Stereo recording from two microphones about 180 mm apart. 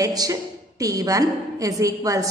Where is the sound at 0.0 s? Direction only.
20° right (ahead or behind).